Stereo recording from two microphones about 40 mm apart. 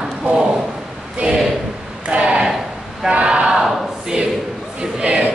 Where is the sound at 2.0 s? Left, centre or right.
Right.